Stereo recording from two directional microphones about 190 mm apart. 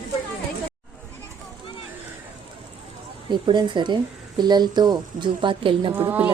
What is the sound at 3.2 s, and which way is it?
A woman's voice, 25° right (ahead or behind).